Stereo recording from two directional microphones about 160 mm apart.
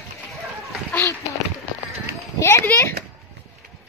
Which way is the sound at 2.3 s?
15° left (ahead or behind).